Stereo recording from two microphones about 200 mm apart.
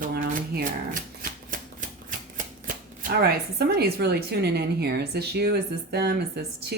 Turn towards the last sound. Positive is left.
turn(degrees=-55)  # may be behind; listen again after turning